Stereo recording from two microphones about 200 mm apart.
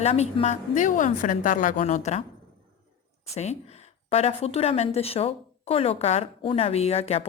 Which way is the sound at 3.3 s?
35° left (ahead or behind).